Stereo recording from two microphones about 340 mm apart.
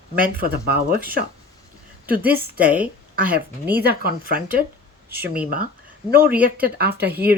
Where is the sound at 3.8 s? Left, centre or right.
Right.